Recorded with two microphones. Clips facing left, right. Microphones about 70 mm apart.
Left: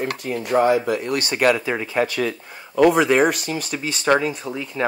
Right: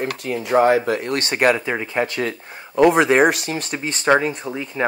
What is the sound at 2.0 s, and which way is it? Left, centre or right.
Speech, right.